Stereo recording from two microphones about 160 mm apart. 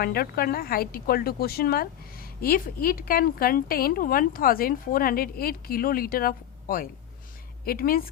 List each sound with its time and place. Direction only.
0.0 s a woman's voice: 70° left (ahead or behind)